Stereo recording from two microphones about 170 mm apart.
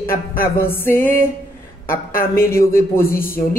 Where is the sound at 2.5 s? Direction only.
15° left (ahead or behind).